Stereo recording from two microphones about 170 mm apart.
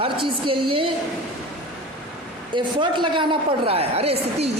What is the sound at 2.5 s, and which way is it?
A woman's voice, 25° right (ahead or behind).